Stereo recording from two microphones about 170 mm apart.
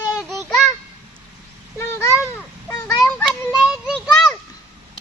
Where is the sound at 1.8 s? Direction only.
15° left (ahead or behind).